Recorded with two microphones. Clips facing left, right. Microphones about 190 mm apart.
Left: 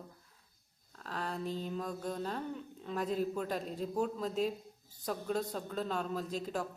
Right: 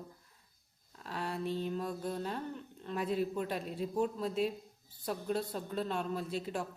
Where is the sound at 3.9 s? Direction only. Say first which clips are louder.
Right 1 dB; centre (ahead or behind).